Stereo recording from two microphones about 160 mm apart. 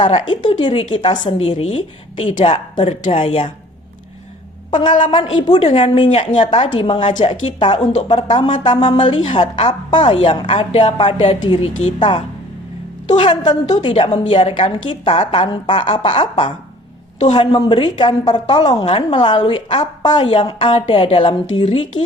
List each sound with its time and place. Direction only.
0.0 s a woman's voice: 30° left (ahead or behind)
4.7 s a woman's voice: 30° left (ahead or behind)
17.2 s a woman's voice: 45° left (ahead or behind)
17.4 s a woman's voice: 30° left (ahead or behind)